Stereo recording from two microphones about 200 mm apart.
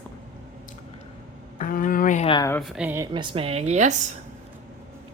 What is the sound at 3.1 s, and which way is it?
Speech, 25° right (ahead or behind).